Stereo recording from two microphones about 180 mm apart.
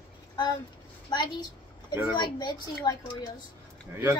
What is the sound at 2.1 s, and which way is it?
Speech, 20° left (ahead or behind).